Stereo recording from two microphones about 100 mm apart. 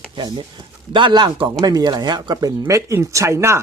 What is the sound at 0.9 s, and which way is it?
Speech, 50° right (ahead or behind).